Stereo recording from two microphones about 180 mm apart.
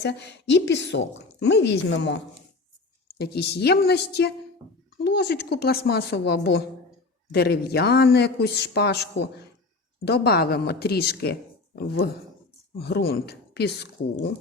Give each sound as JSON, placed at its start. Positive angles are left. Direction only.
{"t": 0.0, "sound": "a woman's voice", "side_deg": 70}
{"t": 3.2, "sound": "speech", "side_deg": 65}